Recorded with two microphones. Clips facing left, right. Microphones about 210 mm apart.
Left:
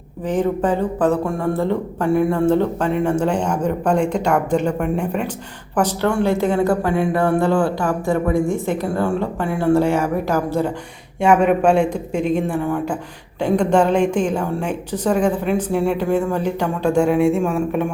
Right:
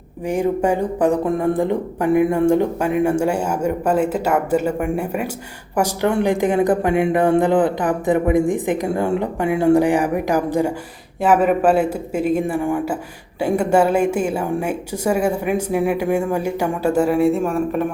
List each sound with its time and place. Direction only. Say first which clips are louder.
0.3 s a man's voice: even; 10° right (ahead or behind)
11.2 s a man's voice: left 1 dB; 5° right (ahead or behind)